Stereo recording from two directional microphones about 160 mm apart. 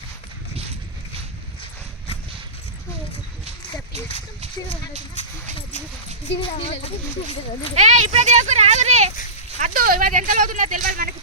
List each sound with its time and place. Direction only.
6.4 s speech: 40° left (ahead or behind)
7.8 s speech: 45° right (ahead or behind)
9.5 s a sound: 50° right (ahead or behind)
9.8 s speech: 60° right (ahead or behind)